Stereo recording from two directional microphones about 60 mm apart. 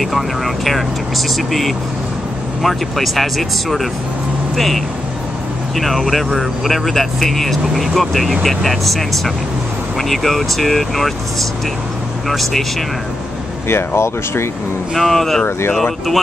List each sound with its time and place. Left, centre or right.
0.0 s speech: centre
12.3 s speech: centre
13.7 s speech: left
15.0 s speech: centre